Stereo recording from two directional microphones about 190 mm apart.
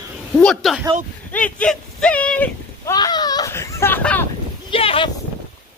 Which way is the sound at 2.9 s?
20° left (ahead or behind).